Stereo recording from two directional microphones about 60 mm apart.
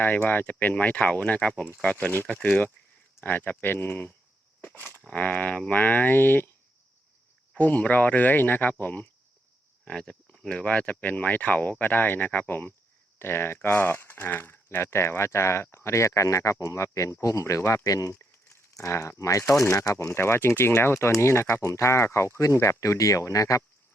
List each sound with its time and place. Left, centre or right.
0.0 s speech: left
7.5 s speech: left
9.8 s speech: centre; by 14.8 s left
14.8 s speech: left
17.8 s speech: left
18.1 s a sound: left
18.7 s speech: left